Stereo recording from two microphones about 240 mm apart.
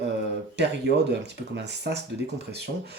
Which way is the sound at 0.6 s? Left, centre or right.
Right.